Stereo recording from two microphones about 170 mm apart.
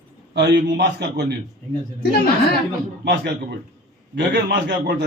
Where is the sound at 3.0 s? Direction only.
90° right.